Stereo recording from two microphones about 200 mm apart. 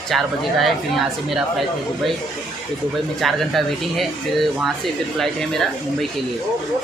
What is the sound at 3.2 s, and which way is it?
Speech, centre (ahead or behind).